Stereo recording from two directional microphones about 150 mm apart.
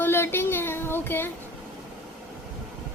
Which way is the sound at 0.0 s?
15° left (ahead or behind).